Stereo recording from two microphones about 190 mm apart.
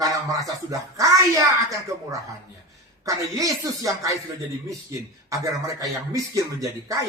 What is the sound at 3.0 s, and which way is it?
Speech, 15° right (ahead or behind).